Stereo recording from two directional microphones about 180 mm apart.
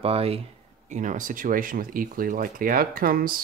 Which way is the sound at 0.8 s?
45° right (ahead or behind).